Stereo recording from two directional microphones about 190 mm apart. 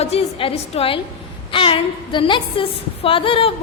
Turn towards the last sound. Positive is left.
turn(degrees=30)  # may be behind; listen again after turning